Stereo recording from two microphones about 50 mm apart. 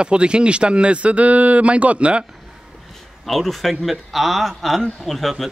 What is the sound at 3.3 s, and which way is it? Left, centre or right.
Speech, centre.